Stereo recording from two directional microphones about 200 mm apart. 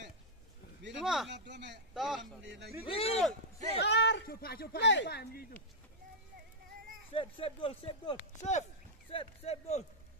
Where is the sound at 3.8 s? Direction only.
65° left (ahead or behind).